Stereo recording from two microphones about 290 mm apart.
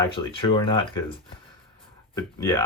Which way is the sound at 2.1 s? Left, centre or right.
Centre.